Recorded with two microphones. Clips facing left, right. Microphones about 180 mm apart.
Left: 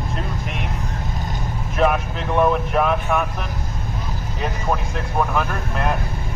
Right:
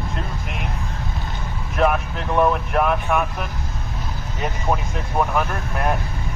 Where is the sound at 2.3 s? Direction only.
Centre (ahead or behind).